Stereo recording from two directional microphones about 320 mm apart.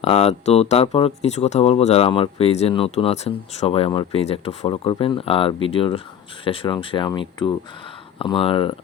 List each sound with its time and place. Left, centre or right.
0.0 s speech: centre